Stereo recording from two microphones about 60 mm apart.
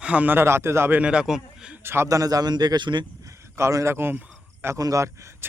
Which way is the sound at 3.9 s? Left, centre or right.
Right.